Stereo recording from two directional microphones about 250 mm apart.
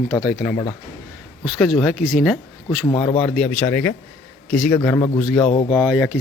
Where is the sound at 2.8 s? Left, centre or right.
Centre.